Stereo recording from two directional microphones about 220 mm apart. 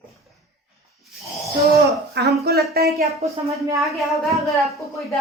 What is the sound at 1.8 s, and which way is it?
Speech, 45° right (ahead or behind).